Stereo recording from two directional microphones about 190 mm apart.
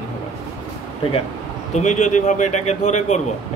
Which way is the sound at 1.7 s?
40° left (ahead or behind).